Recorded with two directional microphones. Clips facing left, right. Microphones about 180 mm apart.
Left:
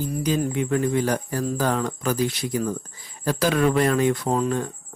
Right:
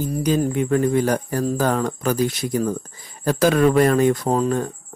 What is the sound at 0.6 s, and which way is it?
Speech, 45° right (ahead or behind).